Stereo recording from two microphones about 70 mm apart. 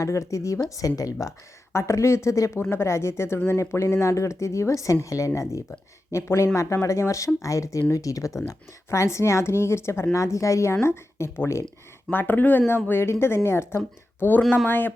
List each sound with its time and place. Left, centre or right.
0.0 s speech: left
1.7 s speech: left
2.6 s speech: left
12.1 s speech: left